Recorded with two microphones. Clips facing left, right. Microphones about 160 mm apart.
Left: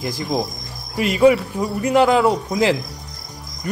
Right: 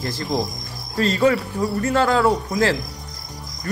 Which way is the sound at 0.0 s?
15° left (ahead or behind).